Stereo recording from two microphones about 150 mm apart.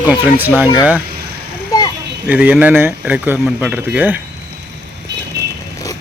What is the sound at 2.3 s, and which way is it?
Speech, 10° right (ahead or behind).